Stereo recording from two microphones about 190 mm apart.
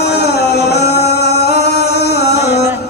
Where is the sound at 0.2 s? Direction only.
60° left (ahead or behind).